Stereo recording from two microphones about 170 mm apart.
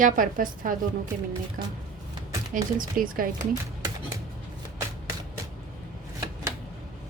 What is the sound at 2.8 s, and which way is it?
Speech, 55° right (ahead or behind).